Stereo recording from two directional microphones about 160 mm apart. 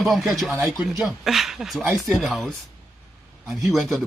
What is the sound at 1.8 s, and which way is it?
Speech, 20° right (ahead or behind).